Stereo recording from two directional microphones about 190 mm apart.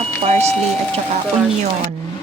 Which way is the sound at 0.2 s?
35° right (ahead or behind).